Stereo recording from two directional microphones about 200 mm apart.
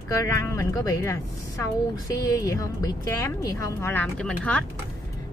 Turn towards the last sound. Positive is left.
turn(degrees=5)  # may be behind; listen again after turning